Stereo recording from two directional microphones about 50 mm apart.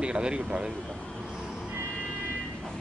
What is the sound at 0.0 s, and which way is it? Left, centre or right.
Speech, right.